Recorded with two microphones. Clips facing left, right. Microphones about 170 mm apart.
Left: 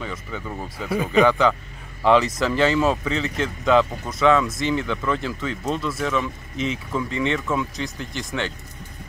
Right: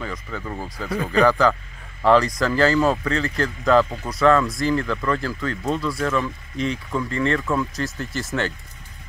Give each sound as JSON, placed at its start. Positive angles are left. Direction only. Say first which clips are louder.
{"t": 0.0, "sound": "speech", "louder": "right 1 dB", "side_deg": 0}
{"t": 6.5, "sound": "speech", "louder": "right 1 dB", "side_deg": -35}
{"t": 6.9, "sound": "speech", "louder": "right 1 dB", "side_deg": 0}